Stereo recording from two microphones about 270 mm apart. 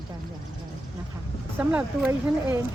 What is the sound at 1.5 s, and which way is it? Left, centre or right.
Speech, centre.